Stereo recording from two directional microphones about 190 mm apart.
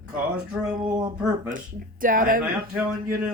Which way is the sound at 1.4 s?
45° right (ahead or behind).